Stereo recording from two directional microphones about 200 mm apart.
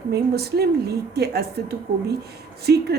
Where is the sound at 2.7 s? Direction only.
55° right (ahead or behind).